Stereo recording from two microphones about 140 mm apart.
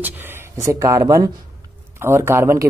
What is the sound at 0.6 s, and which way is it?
A man's voice, 20° right (ahead or behind).